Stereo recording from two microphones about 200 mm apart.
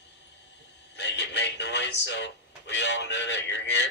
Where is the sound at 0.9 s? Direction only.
60° left (ahead or behind).